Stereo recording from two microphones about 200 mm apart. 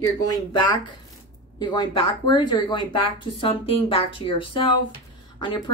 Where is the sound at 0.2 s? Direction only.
20° left (ahead or behind).